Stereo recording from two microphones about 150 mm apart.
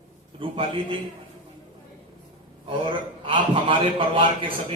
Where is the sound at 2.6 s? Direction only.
35° right (ahead or behind).